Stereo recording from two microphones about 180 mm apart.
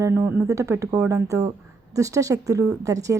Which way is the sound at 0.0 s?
10° right (ahead or behind).